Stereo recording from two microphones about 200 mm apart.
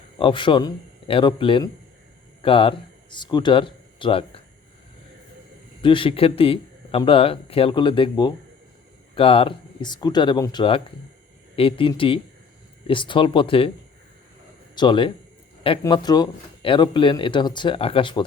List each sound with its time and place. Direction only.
0.2 s speech: 25° left (ahead or behind)
5.8 s speech: 25° left (ahead or behind)
14.8 s speech: 25° left (ahead or behind)